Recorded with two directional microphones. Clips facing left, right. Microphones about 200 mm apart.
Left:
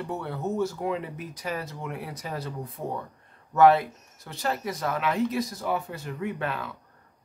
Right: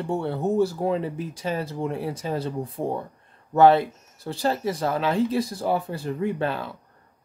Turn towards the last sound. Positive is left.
turn(degrees=-30)  # may be behind; listen again after turning